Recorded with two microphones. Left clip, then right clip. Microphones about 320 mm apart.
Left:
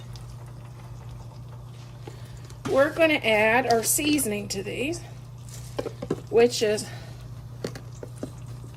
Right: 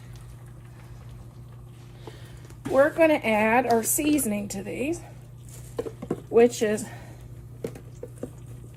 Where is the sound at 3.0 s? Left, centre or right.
Right.